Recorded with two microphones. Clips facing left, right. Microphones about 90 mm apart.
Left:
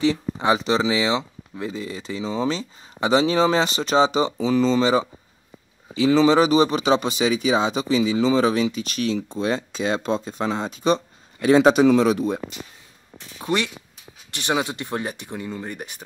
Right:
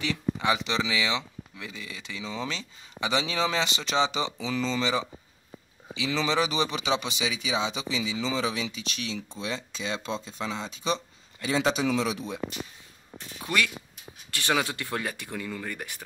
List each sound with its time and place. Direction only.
0.0 s a man's voice: 30° left (ahead or behind); by 12.4 s 50° left (ahead or behind)
13.4 s speech: 25° left (ahead or behind)